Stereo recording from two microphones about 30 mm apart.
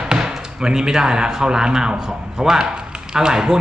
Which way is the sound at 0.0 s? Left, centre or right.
Right.